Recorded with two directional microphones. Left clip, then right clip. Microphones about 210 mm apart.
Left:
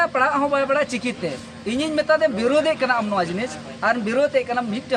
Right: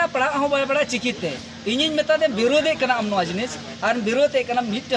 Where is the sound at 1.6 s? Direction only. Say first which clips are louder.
Right 3 dB; 25° left (ahead or behind).